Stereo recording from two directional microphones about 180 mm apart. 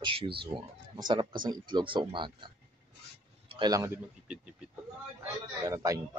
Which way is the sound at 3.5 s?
25° right (ahead or behind).